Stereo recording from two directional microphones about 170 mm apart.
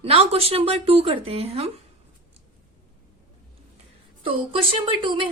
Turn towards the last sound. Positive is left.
turn(degrees=-30)  # may be behind; listen again after turning